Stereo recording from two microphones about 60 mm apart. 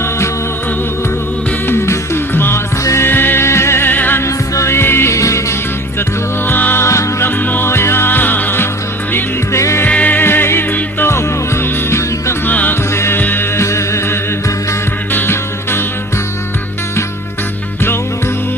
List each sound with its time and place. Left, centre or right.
1.6 s music: left
4.5 s music: left
5.1 s music: left
6.5 s music: left
6.8 s music: left
7.3 s music: left
9.5 s music: left
9.8 s music: left
10.2 s music: left
12.5 s music: left
12.9 s music: left
13.1 s music: left
13.6 s music: left
15.1 s music: left